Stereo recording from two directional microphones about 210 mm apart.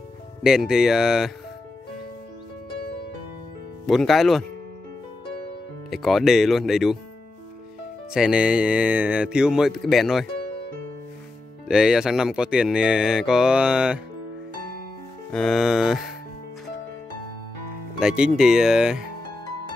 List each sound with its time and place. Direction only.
0.4 s speech: 5° right (ahead or behind)
3.8 s speech: centre (ahead or behind)
5.9 s speech: centre (ahead or behind)
8.1 s speech: 5° right (ahead or behind)
11.6 s speech: 5° right (ahead or behind)
15.3 s speech: centre (ahead or behind)
17.9 s speech: 5° right (ahead or behind)